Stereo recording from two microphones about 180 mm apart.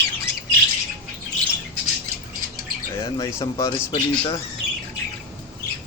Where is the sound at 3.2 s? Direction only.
20° left (ahead or behind).